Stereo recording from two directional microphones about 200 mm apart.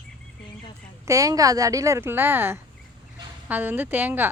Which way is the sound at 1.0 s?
15° right (ahead or behind).